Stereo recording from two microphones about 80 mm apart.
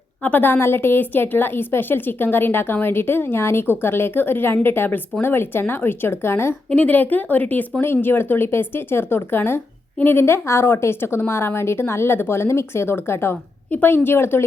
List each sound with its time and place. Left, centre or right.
0.2 s a woman's voice: left
6.7 s a woman's voice: centre